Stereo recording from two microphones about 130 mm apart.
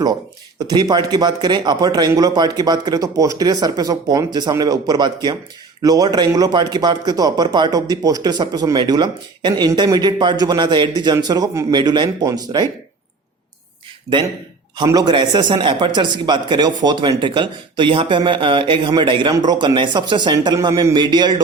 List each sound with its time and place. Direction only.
0.7 s speech: 30° right (ahead or behind)
14.8 s speech: 30° right (ahead or behind)